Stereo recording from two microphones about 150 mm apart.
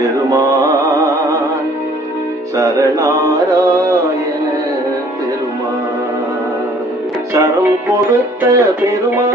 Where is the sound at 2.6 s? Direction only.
20° right (ahead or behind).